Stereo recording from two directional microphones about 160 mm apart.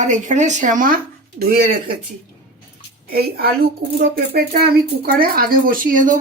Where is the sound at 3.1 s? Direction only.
70° right (ahead or behind).